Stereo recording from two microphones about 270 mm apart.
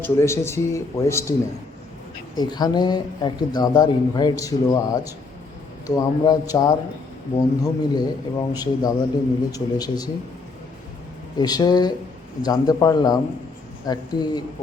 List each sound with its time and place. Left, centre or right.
0.0 s speech: centre
11.3 s speech: centre